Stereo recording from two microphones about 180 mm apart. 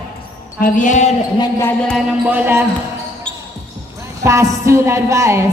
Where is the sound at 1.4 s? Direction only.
15° left (ahead or behind).